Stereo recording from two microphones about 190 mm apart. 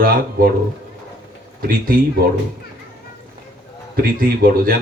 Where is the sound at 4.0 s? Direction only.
50° right (ahead or behind).